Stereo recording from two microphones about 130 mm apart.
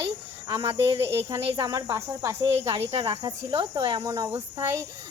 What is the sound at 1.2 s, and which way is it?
Speech, 25° right (ahead or behind).